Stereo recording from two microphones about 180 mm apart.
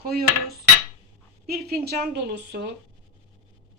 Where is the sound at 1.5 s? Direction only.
60° right (ahead or behind).